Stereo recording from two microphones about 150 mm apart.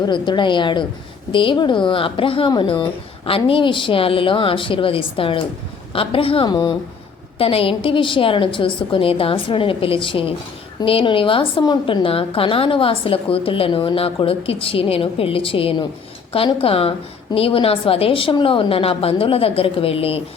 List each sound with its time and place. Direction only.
0.0 s a woman's voice: 30° left (ahead or behind)